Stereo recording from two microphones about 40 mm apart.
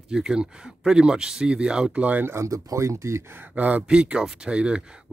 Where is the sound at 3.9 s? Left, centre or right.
Right.